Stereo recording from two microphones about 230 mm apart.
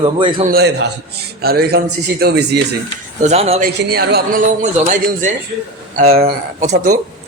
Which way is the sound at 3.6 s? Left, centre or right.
Right.